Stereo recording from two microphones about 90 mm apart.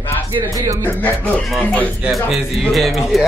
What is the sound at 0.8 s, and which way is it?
Speech, 15° left (ahead or behind).